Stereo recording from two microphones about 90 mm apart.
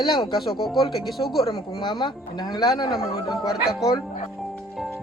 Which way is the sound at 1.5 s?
70° left (ahead or behind).